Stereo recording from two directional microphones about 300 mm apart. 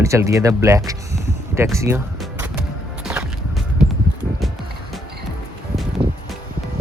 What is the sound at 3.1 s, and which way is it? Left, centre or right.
Music, centre.